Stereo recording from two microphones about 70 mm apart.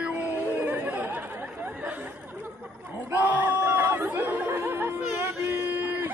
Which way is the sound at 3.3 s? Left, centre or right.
Right.